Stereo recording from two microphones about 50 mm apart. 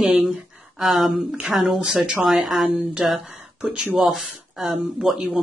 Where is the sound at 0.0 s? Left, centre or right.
Centre.